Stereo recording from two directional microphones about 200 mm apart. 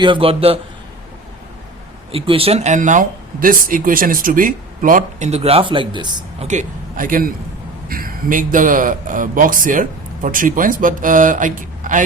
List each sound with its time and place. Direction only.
0.0 s a man's voice: 25° right (ahead or behind)
2.1 s speech: 25° right (ahead or behind)
6.5 s a man's voice: 40° right (ahead or behind)